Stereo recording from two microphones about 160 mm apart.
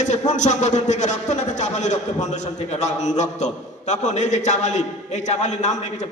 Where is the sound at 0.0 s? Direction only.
50° left (ahead or behind).